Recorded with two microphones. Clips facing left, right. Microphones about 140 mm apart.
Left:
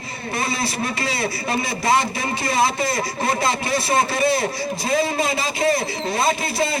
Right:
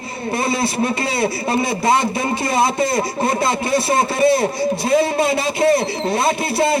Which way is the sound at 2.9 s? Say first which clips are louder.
Right 4 dB; 25° right (ahead or behind).